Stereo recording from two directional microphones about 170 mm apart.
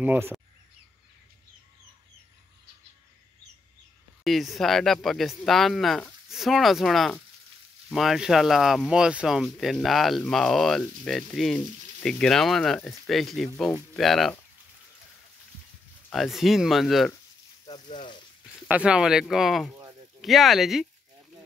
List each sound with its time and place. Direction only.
0.0 s speech: 10° right (ahead or behind)
4.2 s speech: centre (ahead or behind)
16.1 s speech: centre (ahead or behind)
17.7 s speech: 45° left (ahead or behind)
18.7 s speech: 5° right (ahead or behind)
19.7 s a sound: 20° right (ahead or behind)
20.2 s speech: centre (ahead or behind)